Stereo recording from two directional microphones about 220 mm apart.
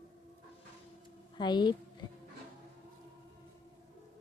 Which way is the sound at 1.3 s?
20° left (ahead or behind).